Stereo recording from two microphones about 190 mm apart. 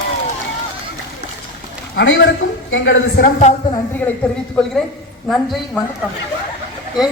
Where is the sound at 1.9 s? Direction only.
70° left (ahead or behind).